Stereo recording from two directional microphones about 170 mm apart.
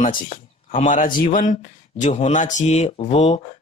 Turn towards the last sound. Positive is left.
turn(degrees=40)  # may be behind; listen again after turning